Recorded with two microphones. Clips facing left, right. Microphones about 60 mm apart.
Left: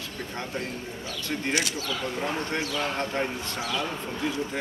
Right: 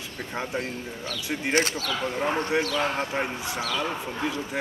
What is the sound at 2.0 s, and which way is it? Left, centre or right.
Speech, centre.